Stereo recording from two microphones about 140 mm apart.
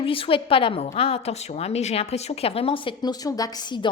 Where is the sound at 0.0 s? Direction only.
40° left (ahead or behind).